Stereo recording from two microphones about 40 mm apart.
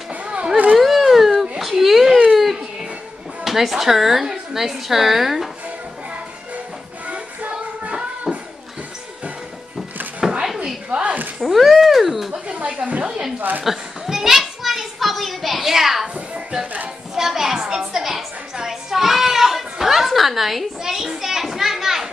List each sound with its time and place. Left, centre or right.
0.1 s a sound: right
0.7 s a sound: centre
1.6 s whimper: centre
3.4 s a woman's voice: centre
7.1 s music: right
10.9 s a sound: right
11.4 s speech: centre
12.3 s speech: right
13.4 s a woman's voice: right
13.7 s children playing: centre
17.1 s a woman's voice: centre